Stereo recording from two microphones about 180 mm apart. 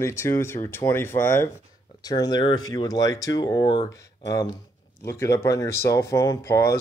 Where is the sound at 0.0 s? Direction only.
15° left (ahead or behind).